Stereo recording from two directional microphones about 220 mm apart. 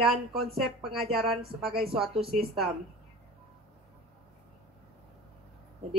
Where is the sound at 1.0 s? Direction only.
25° right (ahead or behind).